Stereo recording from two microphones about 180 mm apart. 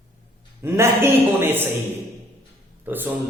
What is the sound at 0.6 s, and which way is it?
Speech, 15° right (ahead or behind).